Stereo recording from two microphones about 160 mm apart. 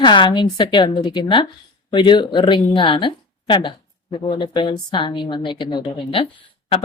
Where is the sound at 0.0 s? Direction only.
30° left (ahead or behind).